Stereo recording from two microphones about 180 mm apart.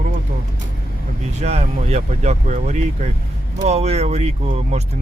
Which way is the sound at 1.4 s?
40° right (ahead or behind).